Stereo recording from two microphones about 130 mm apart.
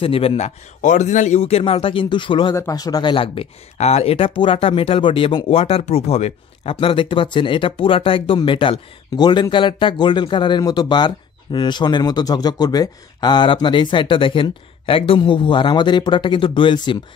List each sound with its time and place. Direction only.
0.0 s speech: 45° left (ahead or behind)
0.8 s speech: 70° left (ahead or behind); by 2.5 s 40° left (ahead or behind)
2.5 s speech: 25° left (ahead or behind)